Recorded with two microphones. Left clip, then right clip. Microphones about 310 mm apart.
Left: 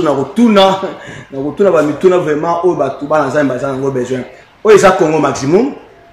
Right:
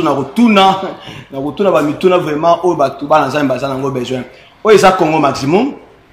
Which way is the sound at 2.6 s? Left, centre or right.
Centre.